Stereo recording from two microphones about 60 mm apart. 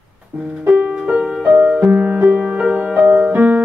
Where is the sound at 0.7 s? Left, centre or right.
Right.